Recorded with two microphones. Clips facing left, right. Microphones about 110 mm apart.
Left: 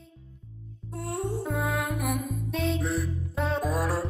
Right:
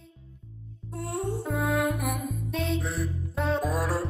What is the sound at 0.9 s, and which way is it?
Music, centre (ahead or behind).